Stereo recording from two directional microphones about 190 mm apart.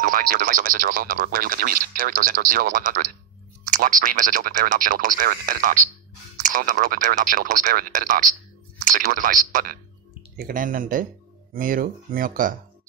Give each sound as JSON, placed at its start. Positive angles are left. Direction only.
{"t": 0.0, "sound": "speech", "side_deg": -45}